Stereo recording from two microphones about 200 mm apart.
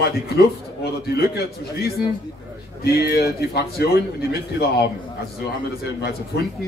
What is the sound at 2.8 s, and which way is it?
A man's voice, 50° left (ahead or behind).